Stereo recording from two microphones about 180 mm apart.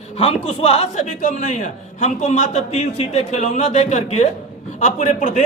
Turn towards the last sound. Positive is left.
turn(degrees=40)  # may be behind; listen again after turning